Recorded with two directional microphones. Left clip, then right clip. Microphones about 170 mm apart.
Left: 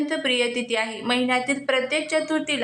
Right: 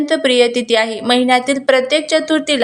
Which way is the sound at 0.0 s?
35° right (ahead or behind).